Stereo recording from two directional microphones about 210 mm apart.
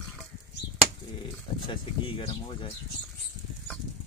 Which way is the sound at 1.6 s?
25° left (ahead or behind).